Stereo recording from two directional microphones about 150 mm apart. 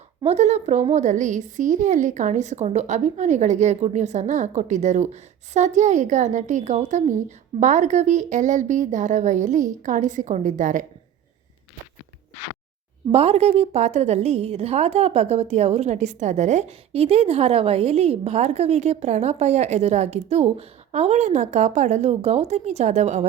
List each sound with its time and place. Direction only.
0.3 s a woman's voice: 50° right (ahead or behind)
13.1 s a woman's voice: 40° right (ahead or behind)